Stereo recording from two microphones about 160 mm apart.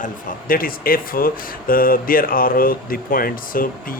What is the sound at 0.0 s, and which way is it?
Speech, 65° left (ahead or behind).